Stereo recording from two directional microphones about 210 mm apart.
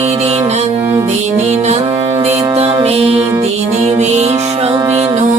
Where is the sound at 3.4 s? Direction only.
30° right (ahead or behind).